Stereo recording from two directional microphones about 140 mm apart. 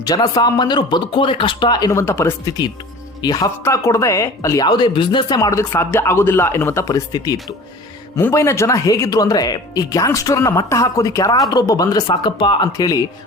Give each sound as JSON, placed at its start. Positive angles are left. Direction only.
{"t": 0.0, "sound": "speech", "side_deg": 30}
{"t": 3.2, "sound": "speech", "side_deg": 30}